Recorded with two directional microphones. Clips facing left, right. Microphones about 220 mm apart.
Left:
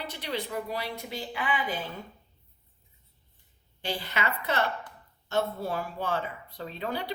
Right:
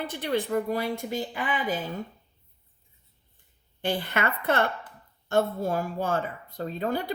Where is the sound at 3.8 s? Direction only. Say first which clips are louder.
Right 5 dB; 55° right (ahead or behind).